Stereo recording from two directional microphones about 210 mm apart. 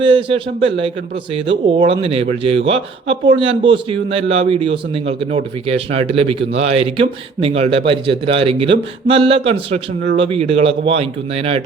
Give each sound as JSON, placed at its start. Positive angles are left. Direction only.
{"t": 0.0, "sound": "a man's voice", "side_deg": -25}